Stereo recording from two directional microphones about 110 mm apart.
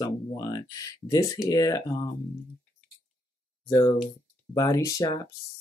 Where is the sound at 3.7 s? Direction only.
30° left (ahead or behind).